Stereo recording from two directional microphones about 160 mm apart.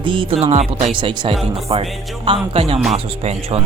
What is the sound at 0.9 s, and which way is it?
Speech, 30° right (ahead or behind).